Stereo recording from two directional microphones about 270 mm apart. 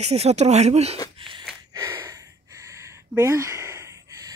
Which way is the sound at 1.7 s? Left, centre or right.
Centre.